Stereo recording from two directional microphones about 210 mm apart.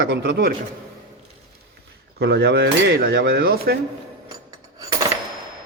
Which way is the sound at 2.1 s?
55° right (ahead or behind).